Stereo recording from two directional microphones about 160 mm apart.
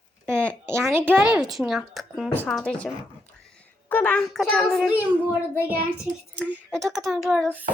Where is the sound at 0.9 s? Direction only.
15° right (ahead or behind).